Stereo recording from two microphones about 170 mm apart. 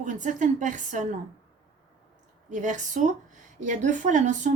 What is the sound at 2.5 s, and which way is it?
A woman's voice, 45° right (ahead or behind).